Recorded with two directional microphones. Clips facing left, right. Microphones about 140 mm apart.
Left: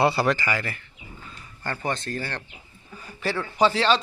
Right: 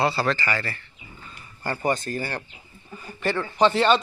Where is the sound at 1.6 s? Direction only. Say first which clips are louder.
Right 4 dB; 10° right (ahead or behind).